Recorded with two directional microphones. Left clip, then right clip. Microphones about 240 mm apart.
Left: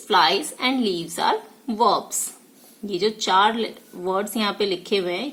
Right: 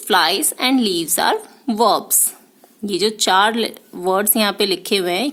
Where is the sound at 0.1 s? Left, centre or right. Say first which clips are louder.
Right 2 dB; right.